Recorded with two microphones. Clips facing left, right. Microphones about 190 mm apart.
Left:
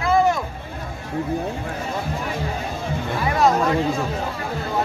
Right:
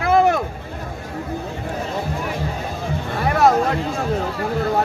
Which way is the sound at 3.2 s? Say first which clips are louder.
Right 2 dB; 60° right (ahead or behind).